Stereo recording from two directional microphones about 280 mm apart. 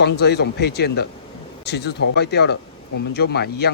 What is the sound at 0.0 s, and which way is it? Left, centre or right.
Speech, left.